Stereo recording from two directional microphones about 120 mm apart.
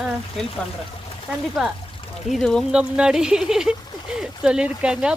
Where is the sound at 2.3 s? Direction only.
5° left (ahead or behind).